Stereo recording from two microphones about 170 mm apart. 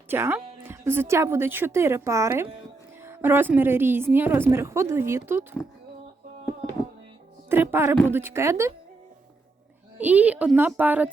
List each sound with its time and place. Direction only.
0.1 s a woman's voice: 10° right (ahead or behind)
7.5 s a woman's voice: 15° right (ahead or behind)
10.0 s a woman's voice: 10° right (ahead or behind)